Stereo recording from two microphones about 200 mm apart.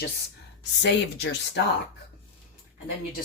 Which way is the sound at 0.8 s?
60° left (ahead or behind).